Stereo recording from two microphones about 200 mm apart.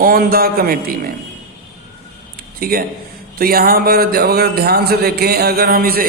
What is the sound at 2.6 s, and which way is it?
Speech, 45° right (ahead or behind).